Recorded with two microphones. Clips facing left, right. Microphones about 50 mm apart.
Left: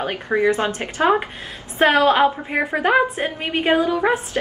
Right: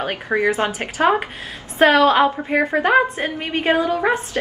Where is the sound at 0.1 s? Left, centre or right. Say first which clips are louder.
Left 1 dB; right.